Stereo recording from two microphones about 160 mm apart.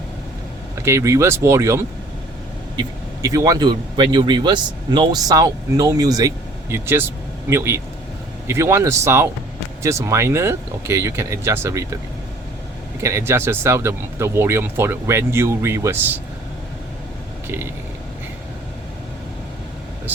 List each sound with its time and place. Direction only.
0.8 s speech: 15° right (ahead or behind)
13.0 s speech: 15° right (ahead or behind)